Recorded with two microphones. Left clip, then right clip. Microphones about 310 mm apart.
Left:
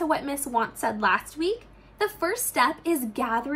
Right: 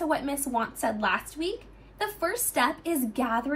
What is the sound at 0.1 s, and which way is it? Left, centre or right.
A woman's voice, centre.